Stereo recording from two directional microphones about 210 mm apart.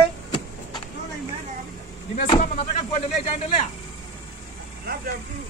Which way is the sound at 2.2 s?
35° left (ahead or behind).